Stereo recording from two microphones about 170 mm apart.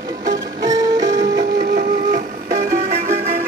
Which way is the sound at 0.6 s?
20° right (ahead or behind).